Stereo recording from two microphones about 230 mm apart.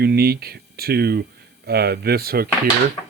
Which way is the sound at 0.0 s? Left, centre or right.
Right.